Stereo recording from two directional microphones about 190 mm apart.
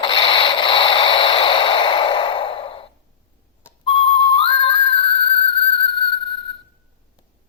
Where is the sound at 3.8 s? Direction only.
30° left (ahead or behind).